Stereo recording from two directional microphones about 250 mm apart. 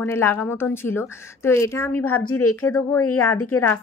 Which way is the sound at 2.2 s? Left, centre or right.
Left.